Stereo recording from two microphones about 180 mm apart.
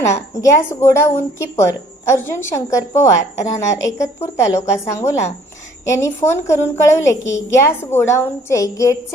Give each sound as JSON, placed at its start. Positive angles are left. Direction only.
{"t": 0.2, "sound": "a woman's voice", "side_deg": 15}